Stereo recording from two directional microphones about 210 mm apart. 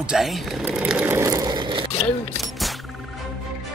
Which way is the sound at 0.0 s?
Centre (ahead or behind).